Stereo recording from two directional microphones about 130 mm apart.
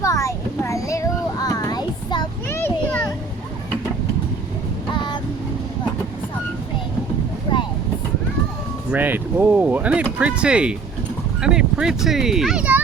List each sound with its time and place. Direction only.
0.0 s a sound: 25° left (ahead or behind)
2.5 s children playing: 20° left (ahead or behind)
4.9 s vehicle: 35° left (ahead or behind)
8.9 s speech: 15° right (ahead or behind)